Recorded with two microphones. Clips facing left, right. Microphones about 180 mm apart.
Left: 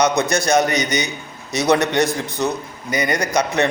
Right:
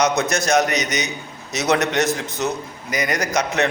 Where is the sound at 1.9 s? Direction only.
Centre (ahead or behind).